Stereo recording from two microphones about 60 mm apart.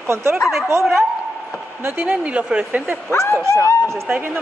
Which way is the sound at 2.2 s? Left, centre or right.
Centre.